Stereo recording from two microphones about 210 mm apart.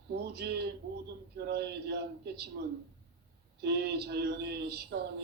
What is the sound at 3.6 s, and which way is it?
Speech, 50° right (ahead or behind).